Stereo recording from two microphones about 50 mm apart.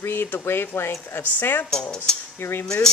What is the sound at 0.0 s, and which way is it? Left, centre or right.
Speech, left.